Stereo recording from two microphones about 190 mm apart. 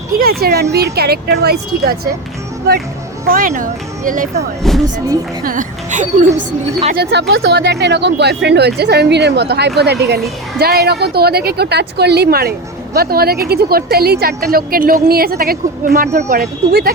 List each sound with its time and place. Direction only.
0.1 s speech: 50° right (ahead or behind)
3.2 s a woman's voice: 45° right (ahead or behind)
6.9 s a woman's voice: 60° right (ahead or behind)